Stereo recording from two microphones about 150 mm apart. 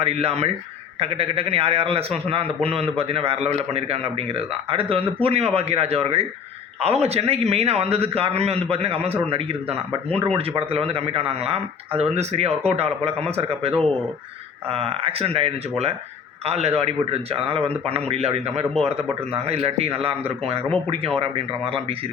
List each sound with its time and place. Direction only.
0.0 s a man's voice: 45° right (ahead or behind)
10.2 s a man's voice: 40° right (ahead or behind)